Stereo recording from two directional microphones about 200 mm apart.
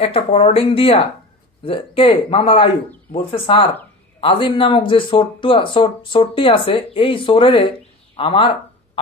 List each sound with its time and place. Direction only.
0.0 s speech: 30° left (ahead or behind)